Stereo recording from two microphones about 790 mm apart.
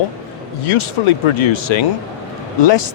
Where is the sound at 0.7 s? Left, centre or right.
Left.